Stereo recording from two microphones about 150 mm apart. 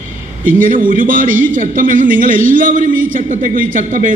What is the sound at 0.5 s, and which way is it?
A man's voice, 65° right (ahead or behind).